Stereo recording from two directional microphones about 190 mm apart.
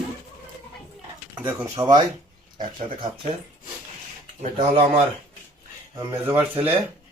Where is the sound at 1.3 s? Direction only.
10° right (ahead or behind); by 3.3 s 25° right (ahead or behind).